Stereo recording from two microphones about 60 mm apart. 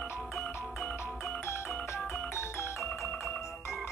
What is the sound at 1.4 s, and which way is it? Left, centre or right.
Music, left.